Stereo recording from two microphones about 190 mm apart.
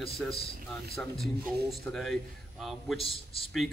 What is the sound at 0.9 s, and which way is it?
Speech, centre (ahead or behind).